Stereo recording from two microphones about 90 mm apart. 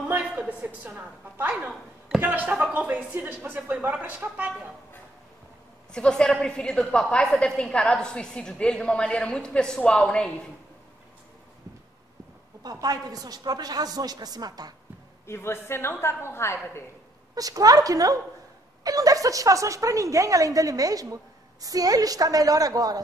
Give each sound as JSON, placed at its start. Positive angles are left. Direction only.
{"t": 0.1, "sound": "a woman's voice", "side_deg": -15}
{"t": 5.9, "sound": "a woman's voice", "side_deg": 10}
{"t": 12.8, "sound": "a woman's voice", "side_deg": -45}
{"t": 15.2, "sound": "a woman's voice", "side_deg": 30}
{"t": 17.4, "sound": "speech", "side_deg": -40}